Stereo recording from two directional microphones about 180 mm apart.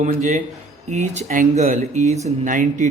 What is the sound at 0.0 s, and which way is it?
A man's voice, 45° right (ahead or behind).